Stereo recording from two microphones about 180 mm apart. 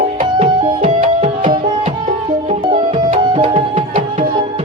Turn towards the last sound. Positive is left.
turn(degrees=-30)  # may be behind; listen again after turning